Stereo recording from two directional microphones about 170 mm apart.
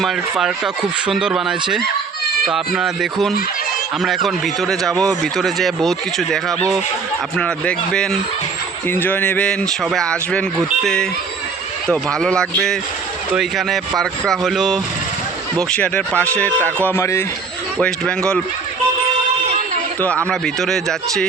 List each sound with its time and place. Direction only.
0.0 s speech: centre (ahead or behind); by 17.2 s 15° left (ahead or behind)
17.7 s speech: 5° left (ahead or behind)
20.3 s speech: centre (ahead or behind)